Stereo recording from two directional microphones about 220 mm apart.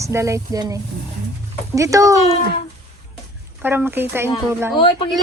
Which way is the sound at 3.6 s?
10° right (ahead or behind).